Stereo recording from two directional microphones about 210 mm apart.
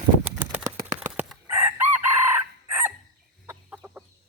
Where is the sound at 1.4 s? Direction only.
10° right (ahead or behind).